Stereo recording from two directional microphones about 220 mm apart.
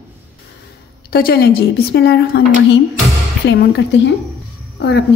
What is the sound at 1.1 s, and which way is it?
Speech, 45° left (ahead or behind).